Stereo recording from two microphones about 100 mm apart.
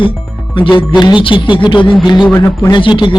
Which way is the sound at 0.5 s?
55° left (ahead or behind).